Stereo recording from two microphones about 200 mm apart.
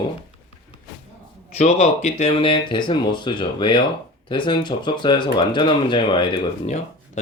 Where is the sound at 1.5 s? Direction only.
30° left (ahead or behind).